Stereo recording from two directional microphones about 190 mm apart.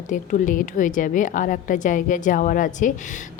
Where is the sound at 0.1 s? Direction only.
45° left (ahead or behind).